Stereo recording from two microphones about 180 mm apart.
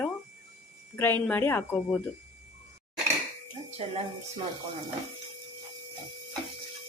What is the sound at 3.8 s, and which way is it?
Speech, 35° right (ahead or behind).